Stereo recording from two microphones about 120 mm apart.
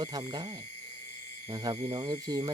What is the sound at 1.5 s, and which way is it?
Speech, 35° right (ahead or behind).